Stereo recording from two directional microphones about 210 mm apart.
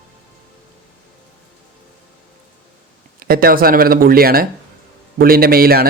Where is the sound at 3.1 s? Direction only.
45° right (ahead or behind).